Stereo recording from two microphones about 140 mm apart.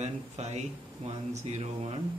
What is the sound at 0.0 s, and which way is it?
Speech, 50° right (ahead or behind).